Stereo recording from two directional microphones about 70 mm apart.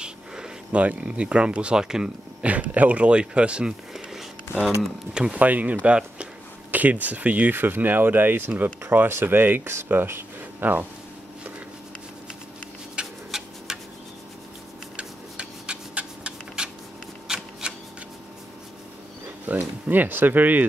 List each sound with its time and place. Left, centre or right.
0.0 s speech: centre
2.4 s speech: right
3.9 s a sound: centre
4.6 s speech: centre
5.4 s speech: right
12.9 s tick-tock: centre
15.0 s rub: centre
17.3 s shuffling cards: centre
19.4 s speech: right